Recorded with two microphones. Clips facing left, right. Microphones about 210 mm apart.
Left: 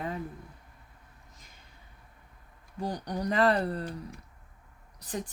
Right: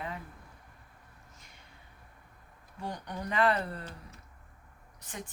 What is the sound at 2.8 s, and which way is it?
Speech, 35° left (ahead or behind).